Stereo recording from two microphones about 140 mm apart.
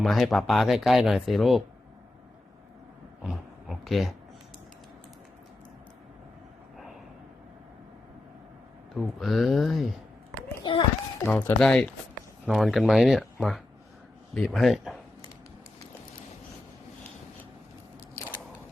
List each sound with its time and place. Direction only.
0.0 s speech: centre (ahead or behind)
3.2 s speech: centre (ahead or behind)
9.0 s speech: centre (ahead or behind)
10.6 s children playing: 35° left (ahead or behind)
11.3 s speech: 10° left (ahead or behind)